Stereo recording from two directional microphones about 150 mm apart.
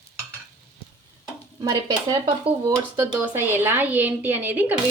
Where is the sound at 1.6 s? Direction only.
30° right (ahead or behind).